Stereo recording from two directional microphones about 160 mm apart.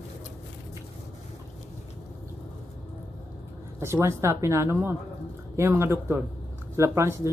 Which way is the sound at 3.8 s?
15° right (ahead or behind).